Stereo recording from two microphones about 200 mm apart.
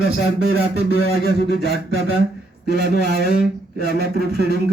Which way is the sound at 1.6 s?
55° right (ahead or behind).